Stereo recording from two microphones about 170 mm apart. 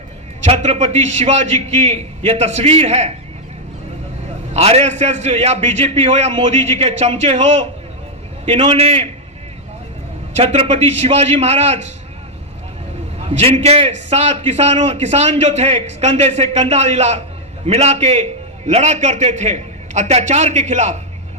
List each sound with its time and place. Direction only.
0.4 s a man's voice: 40° right (ahead or behind)
4.5 s a man's voice: 40° right (ahead or behind)
10.3 s a man's voice: 35° right (ahead or behind)
13.1 s a man's voice: 35° right (ahead or behind)